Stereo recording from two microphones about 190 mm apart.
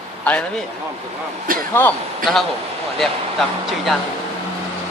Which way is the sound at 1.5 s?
45° right (ahead or behind).